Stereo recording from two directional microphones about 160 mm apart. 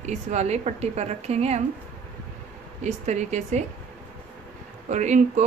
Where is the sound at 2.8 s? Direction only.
45° right (ahead or behind).